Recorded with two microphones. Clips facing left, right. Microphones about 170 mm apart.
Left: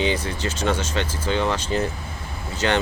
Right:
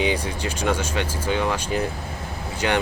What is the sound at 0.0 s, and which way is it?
Speech, 10° right (ahead or behind).